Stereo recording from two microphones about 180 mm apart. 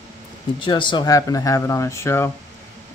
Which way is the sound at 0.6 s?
25° left (ahead or behind).